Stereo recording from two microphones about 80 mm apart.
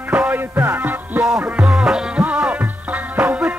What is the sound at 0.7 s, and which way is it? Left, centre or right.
Music, right.